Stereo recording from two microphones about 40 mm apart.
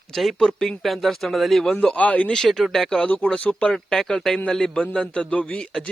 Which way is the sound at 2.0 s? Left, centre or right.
Left.